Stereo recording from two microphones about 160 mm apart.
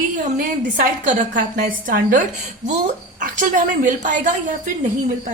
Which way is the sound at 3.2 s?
55° right (ahead or behind).